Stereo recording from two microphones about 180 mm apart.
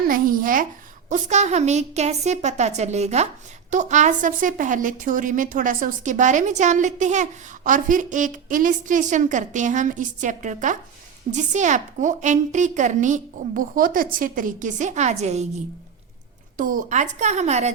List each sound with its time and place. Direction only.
0.1 s a woman's voice: 50° right (ahead or behind)